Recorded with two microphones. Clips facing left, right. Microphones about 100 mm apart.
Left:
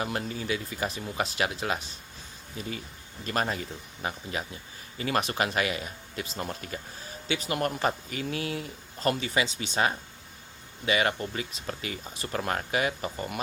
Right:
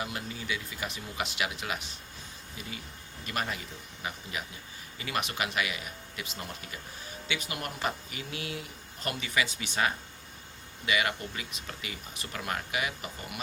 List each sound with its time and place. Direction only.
0.0 s speech: 45° left (ahead or behind)
2.6 s speech: 45° left (ahead or behind)